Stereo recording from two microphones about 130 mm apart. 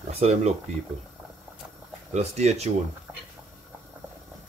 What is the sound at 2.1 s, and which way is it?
Speech, 55° right (ahead or behind).